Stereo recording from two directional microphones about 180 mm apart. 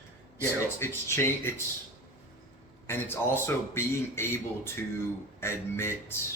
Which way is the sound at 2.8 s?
10° left (ahead or behind).